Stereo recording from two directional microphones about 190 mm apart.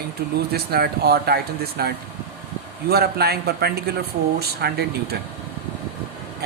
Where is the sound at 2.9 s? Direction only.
55° right (ahead or behind).